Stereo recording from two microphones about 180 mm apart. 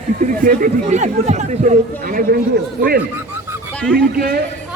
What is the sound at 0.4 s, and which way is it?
Speech, 45° right (ahead or behind).